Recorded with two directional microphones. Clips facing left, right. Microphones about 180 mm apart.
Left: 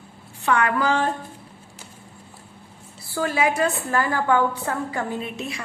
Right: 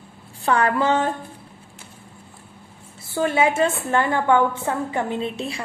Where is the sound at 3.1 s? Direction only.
25° right (ahead or behind).